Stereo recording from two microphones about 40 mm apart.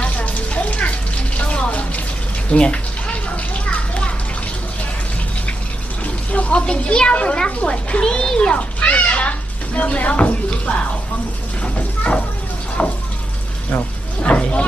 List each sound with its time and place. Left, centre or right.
0.0 s a sound: left
1.5 s bathtub: left
2.5 s speech: left
3.3 s children playing: left
6.3 s speech: left
9.0 s a sound: left
9.7 s speech: left
12.8 s a sound: left
14.2 s vehicle: left